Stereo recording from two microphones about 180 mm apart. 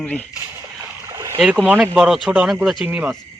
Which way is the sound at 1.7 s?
5° right (ahead or behind).